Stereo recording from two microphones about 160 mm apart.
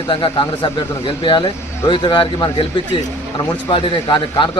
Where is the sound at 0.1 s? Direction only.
30° left (ahead or behind).